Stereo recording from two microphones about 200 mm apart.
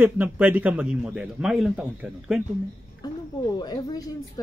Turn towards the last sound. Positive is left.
turn(degrees=20)  # may be behind; listen again after turning